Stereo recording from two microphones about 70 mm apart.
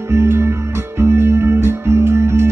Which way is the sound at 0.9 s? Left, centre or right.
Right.